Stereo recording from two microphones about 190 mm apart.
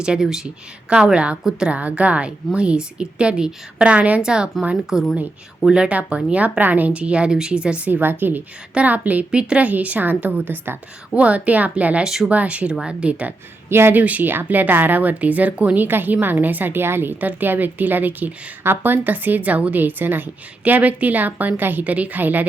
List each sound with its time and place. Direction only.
0.0 s a woman's voice: 5° right (ahead or behind)